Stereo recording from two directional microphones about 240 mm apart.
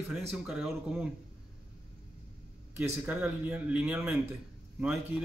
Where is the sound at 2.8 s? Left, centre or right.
Centre.